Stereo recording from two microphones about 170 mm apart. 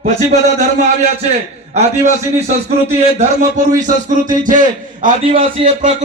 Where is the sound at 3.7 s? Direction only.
50° right (ahead or behind).